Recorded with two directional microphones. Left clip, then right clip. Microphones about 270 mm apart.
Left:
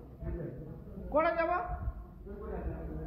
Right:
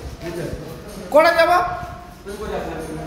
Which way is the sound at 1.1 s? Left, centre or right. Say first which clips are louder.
Right 16 dB; centre.